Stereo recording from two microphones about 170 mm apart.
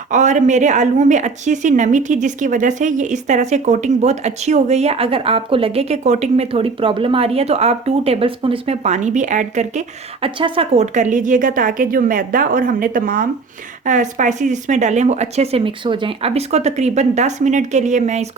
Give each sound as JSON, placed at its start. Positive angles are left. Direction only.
{"t": 0.1, "sound": "a woman's voice", "side_deg": -45}